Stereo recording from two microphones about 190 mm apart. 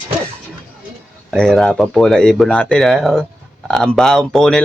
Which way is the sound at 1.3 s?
Centre (ahead or behind).